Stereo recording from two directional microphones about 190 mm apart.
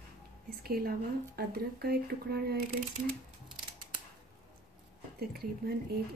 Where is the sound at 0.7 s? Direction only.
55° right (ahead or behind).